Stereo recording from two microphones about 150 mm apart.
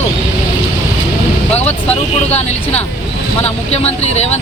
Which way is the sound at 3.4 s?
45° left (ahead or behind).